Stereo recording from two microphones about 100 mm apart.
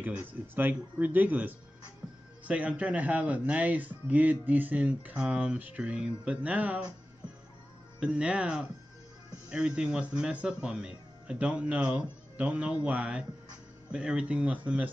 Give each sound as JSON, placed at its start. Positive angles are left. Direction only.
{"t": 0.0, "sound": "speech", "side_deg": -20}
{"t": 8.0, "sound": "speech", "side_deg": -10}